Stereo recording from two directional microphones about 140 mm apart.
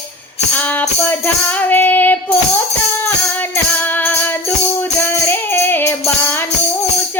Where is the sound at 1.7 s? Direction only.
15° left (ahead or behind).